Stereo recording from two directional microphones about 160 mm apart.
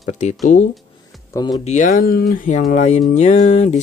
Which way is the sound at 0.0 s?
50° left (ahead or behind).